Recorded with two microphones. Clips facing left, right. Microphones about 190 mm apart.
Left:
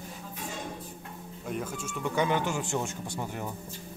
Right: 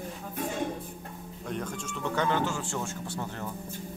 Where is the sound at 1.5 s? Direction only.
5° left (ahead or behind).